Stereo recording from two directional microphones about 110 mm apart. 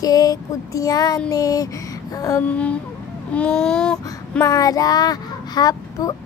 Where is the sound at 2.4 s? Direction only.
10° left (ahead or behind).